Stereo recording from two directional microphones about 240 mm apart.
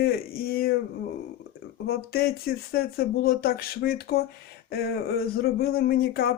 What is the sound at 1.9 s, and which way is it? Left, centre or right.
Speech, left.